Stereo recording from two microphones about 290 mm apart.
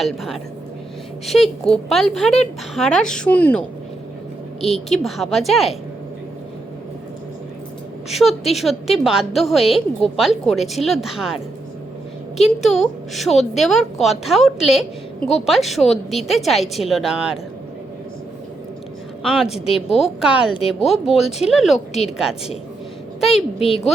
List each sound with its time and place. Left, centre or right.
0.0 s a woman's voice: centre
4.7 s a woman's voice: centre
8.1 s a woman's voice: centre
12.4 s a woman's voice: centre
13.3 s a woman's voice: left
13.6 s a woman's voice: centre
19.3 s a woman's voice: centre
23.3 s a woman's voice: centre